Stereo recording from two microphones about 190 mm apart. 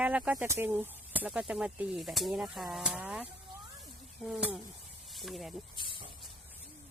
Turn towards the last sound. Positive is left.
turn(degrees=0)  # may be behind; listen again after turning